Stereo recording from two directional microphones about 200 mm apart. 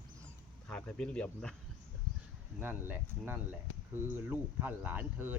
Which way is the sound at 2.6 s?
10° right (ahead or behind).